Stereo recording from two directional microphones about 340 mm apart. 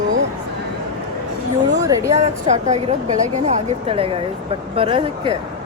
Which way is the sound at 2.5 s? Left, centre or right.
Right.